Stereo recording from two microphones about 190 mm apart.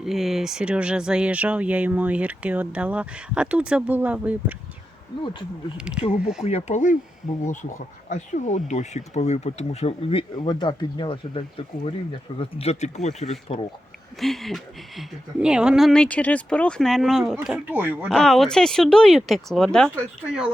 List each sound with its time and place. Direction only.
0.0 s speech: centre (ahead or behind)
5.2 s speech: 25° left (ahead or behind)
5.7 s speech: 5° right (ahead or behind)
6.0 s speech: 30° left (ahead or behind)
14.2 s speech: centre (ahead or behind)